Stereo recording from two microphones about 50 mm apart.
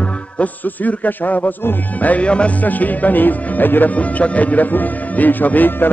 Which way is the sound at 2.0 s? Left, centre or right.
Left.